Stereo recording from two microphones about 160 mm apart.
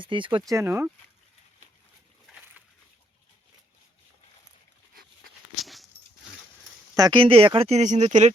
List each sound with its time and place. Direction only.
0.0 s speech: 30° right (ahead or behind)
0.5 s speech: 15° right (ahead or behind)
5.5 s dog: centre (ahead or behind)
6.9 s speech: 25° right (ahead or behind); by 8.3 s 45° right (ahead or behind)